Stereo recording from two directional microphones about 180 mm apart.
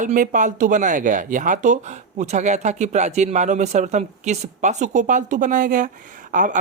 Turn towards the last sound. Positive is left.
turn(degrees=-45)  # may be behind; listen again after turning